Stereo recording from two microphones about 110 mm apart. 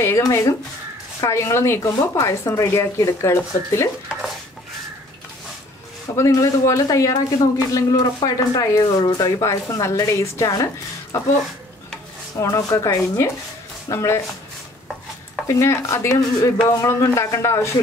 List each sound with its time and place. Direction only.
0.0 s speech: 25° left (ahead or behind)
4.1 s stir: 5° right (ahead or behind)
6.1 s speech: 30° left (ahead or behind)
12.4 s speech: 30° left (ahead or behind)
15.4 s speech: 25° left (ahead or behind)